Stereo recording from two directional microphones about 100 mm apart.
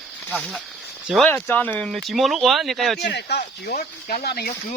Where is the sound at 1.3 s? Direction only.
20° left (ahead or behind).